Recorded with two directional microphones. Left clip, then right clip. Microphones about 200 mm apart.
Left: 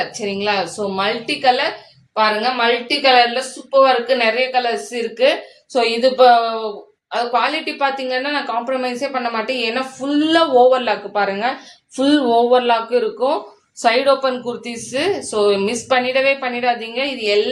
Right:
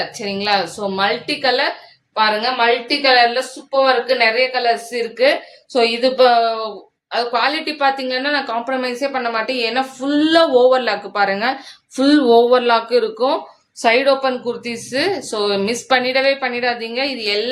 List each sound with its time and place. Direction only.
0.2 s a woman's voice: 20° right (ahead or behind)